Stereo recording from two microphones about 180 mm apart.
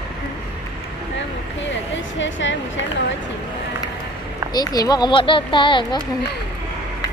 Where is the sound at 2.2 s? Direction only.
90° left.